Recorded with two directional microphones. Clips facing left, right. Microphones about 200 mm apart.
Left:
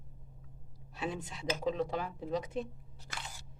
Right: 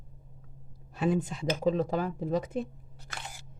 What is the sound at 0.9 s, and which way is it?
Speech, 50° right (ahead or behind).